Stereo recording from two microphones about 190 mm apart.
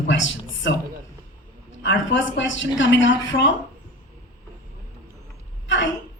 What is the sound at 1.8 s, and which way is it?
A man's voice, 70° left (ahead or behind).